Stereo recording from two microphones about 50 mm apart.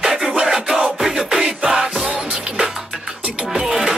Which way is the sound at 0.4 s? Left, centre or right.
Centre.